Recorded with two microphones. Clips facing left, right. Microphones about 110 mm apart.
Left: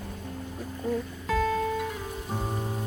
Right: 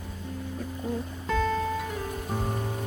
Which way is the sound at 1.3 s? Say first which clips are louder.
Even; 5° left (ahead or behind).